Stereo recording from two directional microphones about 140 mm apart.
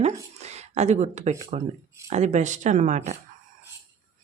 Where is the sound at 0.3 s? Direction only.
50° right (ahead or behind).